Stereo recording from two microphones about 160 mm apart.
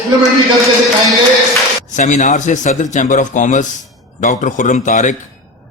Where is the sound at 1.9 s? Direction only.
50° left (ahead or behind).